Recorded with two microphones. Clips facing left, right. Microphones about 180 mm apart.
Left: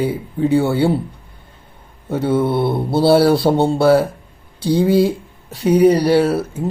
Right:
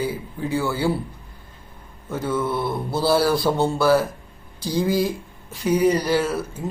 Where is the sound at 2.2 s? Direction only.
30° left (ahead or behind).